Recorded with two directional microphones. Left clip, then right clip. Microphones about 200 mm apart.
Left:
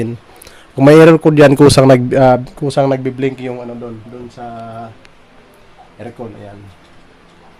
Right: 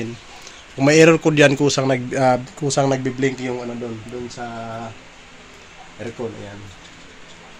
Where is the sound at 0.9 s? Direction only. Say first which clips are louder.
Left 5 dB; 35° left (ahead or behind).